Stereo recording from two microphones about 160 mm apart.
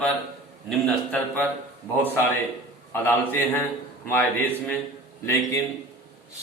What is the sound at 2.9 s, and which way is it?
A man's voice, 15° left (ahead or behind).